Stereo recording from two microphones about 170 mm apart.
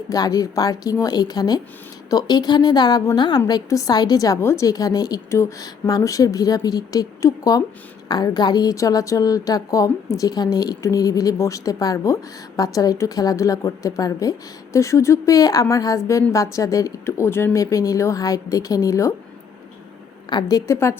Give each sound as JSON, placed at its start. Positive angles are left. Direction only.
{"t": 0.1, "sound": "a woman's voice", "side_deg": 20}
{"t": 20.3, "sound": "a woman's voice", "side_deg": 20}